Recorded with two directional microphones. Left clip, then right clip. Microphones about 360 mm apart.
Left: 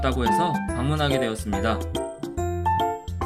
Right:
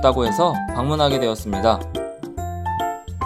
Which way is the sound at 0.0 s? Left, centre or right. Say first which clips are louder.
Right 6 dB; centre.